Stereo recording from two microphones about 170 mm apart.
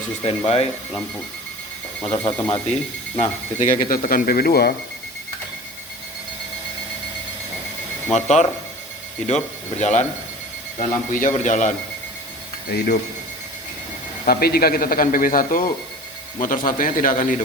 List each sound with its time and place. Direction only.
0.2 s speech: 35° left (ahead or behind)
2.2 s speech: 35° left (ahead or behind)
3.2 s a man's voice: 50° left (ahead or behind); by 4.7 s 65° left (ahead or behind)
8.1 s a man's voice: 40° left (ahead or behind)
12.7 s speech: 75° left (ahead or behind)
14.3 s a man's voice: 65° left (ahead or behind); by 17.4 s 45° left (ahead or behind)